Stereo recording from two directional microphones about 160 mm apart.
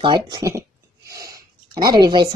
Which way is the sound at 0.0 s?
25° right (ahead or behind).